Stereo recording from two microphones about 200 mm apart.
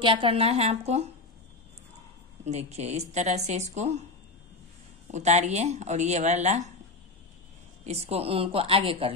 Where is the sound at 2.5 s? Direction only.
35° right (ahead or behind).